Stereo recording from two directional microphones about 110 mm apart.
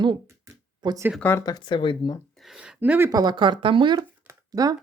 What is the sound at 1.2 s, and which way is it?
Speech, 20° left (ahead or behind).